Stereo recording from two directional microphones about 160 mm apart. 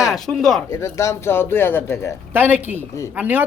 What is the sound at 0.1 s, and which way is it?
Speech, centre (ahead or behind).